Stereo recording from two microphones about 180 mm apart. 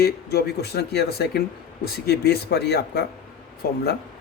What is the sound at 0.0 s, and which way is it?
Speech, 60° left (ahead or behind).